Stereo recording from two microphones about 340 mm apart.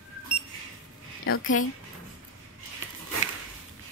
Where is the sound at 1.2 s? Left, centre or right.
Left.